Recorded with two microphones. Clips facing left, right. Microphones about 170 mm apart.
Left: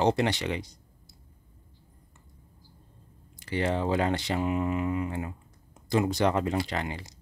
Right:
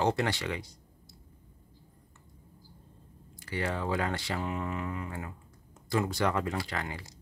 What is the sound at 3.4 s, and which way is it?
Speech, 20° left (ahead or behind).